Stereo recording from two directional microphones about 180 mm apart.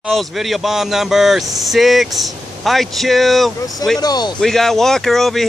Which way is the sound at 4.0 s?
20° left (ahead or behind).